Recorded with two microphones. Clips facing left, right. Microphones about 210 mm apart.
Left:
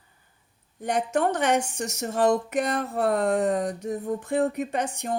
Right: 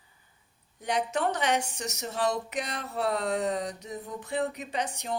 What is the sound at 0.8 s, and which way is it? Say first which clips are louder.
Speech: left 4 dB; 50° left (ahead or behind).